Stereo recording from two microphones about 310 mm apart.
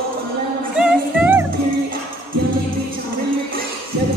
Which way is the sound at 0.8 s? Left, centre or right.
Centre.